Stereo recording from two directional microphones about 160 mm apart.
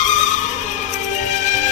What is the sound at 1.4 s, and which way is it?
Music, 50° left (ahead or behind).